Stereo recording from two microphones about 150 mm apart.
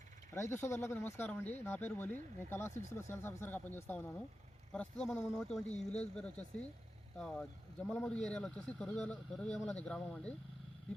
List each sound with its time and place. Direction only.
0.3 s speech: 20° left (ahead or behind)